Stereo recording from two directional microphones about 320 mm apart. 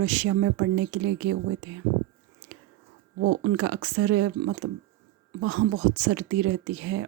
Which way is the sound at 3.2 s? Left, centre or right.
Right.